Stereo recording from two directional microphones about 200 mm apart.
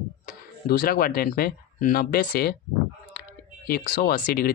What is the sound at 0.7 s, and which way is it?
Speech, 50° left (ahead or behind).